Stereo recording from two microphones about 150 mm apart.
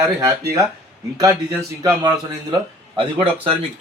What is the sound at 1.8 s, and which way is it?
A man's voice, 25° right (ahead or behind).